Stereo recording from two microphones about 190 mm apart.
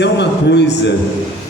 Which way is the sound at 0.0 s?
65° left (ahead or behind).